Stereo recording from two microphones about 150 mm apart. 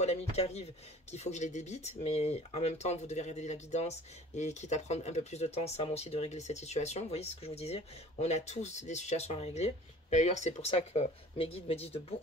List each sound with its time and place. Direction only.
0.0 s speech: 45° left (ahead or behind)